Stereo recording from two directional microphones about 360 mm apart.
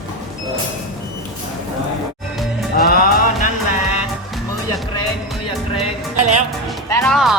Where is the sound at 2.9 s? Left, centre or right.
Left.